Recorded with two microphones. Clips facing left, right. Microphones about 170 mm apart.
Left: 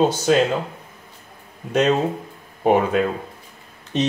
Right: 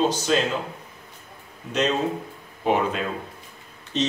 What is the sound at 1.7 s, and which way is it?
Speech, 55° left (ahead or behind).